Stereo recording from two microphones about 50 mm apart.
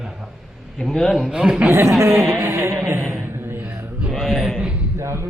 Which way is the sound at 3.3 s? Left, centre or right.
Right.